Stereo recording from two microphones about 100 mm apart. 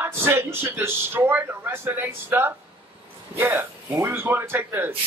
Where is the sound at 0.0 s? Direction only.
25° right (ahead or behind).